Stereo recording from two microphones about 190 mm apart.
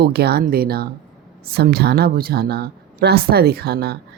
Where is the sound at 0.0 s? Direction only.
55° right (ahead or behind).